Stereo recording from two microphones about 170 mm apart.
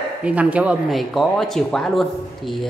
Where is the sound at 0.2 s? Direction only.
10° right (ahead or behind).